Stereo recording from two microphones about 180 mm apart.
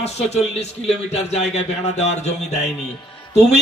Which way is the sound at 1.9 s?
40° left (ahead or behind).